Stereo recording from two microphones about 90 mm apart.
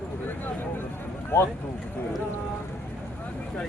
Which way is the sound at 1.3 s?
30° left (ahead or behind).